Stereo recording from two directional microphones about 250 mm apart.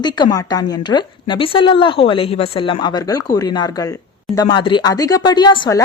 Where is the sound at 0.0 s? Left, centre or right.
Centre.